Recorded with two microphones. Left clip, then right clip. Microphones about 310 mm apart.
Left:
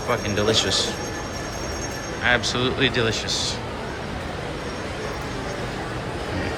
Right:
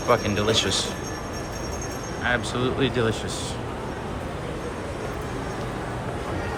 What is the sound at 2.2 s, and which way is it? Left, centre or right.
Speech, centre.